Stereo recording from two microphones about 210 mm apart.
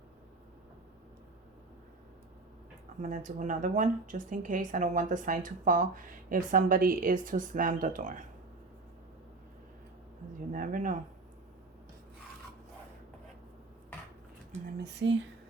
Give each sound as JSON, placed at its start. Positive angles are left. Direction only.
{"t": 3.0, "sound": "speech", "side_deg": -40}
{"t": 10.5, "sound": "speech", "side_deg": -40}
{"t": 14.8, "sound": "speech", "side_deg": -55}